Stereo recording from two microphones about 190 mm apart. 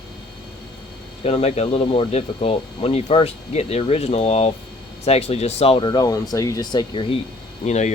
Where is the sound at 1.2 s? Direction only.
30° left (ahead or behind).